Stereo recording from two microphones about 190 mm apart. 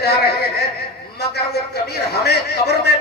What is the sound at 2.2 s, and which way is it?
Speech, 60° left (ahead or behind).